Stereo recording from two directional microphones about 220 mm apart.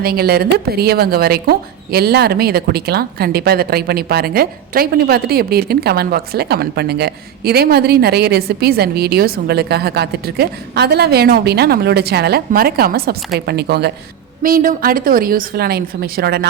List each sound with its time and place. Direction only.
0.0 s a woman's voice: 45° right (ahead or behind)